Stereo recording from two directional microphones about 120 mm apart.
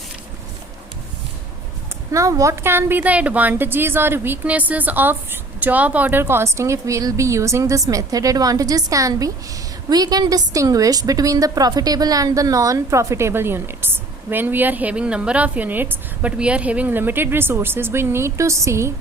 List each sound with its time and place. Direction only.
2.1 s a woman's voice: 25° right (ahead or behind)